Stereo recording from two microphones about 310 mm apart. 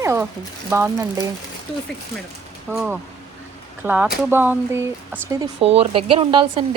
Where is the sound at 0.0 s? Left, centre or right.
Centre.